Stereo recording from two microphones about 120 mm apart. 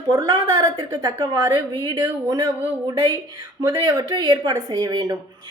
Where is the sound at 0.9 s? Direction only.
35° right (ahead or behind).